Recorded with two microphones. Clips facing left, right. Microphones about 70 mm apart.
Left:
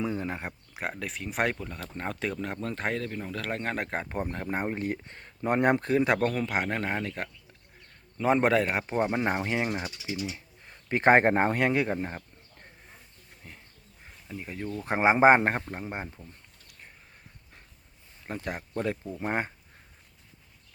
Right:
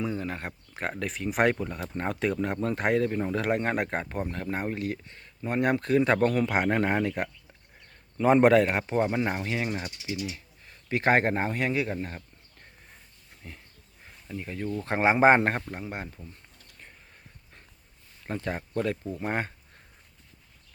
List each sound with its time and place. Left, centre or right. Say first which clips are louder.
0.1 s speech: even; centre
4.8 s speech: even; left
5.7 s speech: right 1 dB; centre
6.2 s speech: right 4 dB; centre
8.8 s speech: right 1 dB; centre; by 9.7 s left
9.7 s speech: left 1 dB; centre
10.1 s speech: right 2 dB; left
11.9 s speech: left 2 dB; left
13.4 s speech: right 4 dB; centre; by 16.0 s left
18.2 s speech: right 3 dB; centre